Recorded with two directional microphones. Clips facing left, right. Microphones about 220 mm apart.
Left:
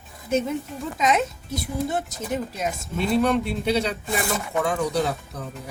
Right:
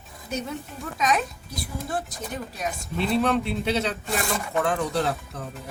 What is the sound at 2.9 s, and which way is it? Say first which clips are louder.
Speech: left 2 dB; 5° left (ahead or behind).